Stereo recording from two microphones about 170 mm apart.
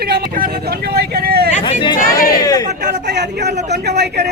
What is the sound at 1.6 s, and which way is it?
Chatter, 25° left (ahead or behind).